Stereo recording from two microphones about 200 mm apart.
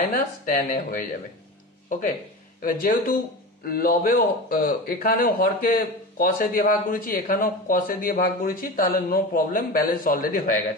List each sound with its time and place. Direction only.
0.1 s a man's voice: 45° left (ahead or behind)
2.6 s a man's voice: 45° left (ahead or behind)